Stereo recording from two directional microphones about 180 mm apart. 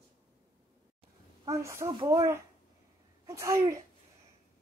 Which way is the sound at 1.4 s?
15° right (ahead or behind).